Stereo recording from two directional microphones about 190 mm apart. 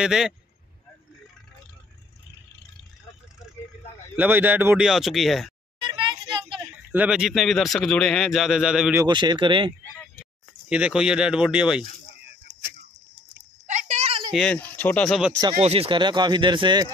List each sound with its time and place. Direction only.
0.0 s a man's voice: 5° right (ahead or behind)
4.2 s a man's voice: 10° right (ahead or behind)
5.8 s a sound: 25° right (ahead or behind)
6.9 s a man's voice: 5° right (ahead or behind)
9.0 s speech: 25° right (ahead or behind)
10.7 s a man's voice: 5° right (ahead or behind)
13.7 s a sound: 40° right (ahead or behind)
14.3 s a man's voice: 5° left (ahead or behind)
15.6 s speech: 30° right (ahead or behind)